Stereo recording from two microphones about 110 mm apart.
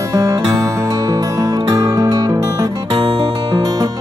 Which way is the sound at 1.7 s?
30° right (ahead or behind).